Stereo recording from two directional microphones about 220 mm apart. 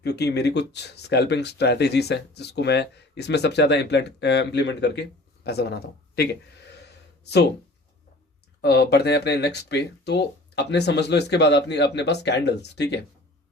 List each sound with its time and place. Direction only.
0.0 s speech: 50° left (ahead or behind)
8.6 s speech: 50° left (ahead or behind)